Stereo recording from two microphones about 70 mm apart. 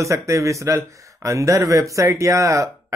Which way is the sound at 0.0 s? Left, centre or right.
Right.